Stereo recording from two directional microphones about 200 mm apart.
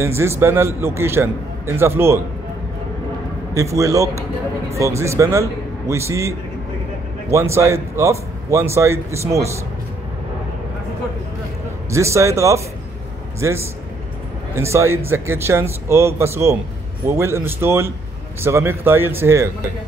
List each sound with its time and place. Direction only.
0.0 s speech: 15° right (ahead or behind)
3.5 s speech: 15° right (ahead or behind)
11.9 s speech: 15° right (ahead or behind)